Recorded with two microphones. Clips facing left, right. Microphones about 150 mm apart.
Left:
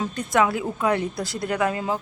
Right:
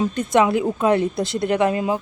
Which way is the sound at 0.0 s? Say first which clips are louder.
Right 4 dB; 20° right (ahead or behind).